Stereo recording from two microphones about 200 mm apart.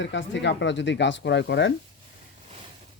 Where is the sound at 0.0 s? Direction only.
65° left (ahead or behind).